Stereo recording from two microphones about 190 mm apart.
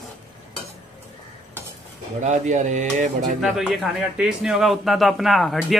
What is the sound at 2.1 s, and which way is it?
Speech, 40° right (ahead or behind).